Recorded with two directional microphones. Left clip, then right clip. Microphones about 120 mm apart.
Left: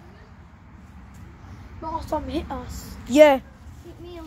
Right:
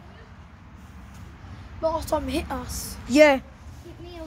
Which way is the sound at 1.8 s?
10° right (ahead or behind).